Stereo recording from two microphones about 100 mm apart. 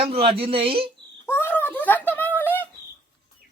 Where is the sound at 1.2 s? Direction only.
25° left (ahead or behind).